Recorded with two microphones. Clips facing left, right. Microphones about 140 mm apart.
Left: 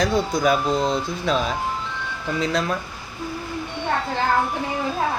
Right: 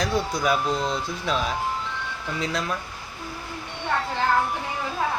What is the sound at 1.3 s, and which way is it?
A woman's voice, 5° right (ahead or behind).